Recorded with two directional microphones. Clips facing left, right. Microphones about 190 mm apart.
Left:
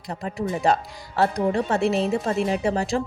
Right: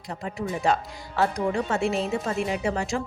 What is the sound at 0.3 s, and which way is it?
A woman's voice, 35° left (ahead or behind).